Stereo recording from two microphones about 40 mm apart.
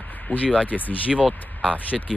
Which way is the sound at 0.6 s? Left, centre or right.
Left.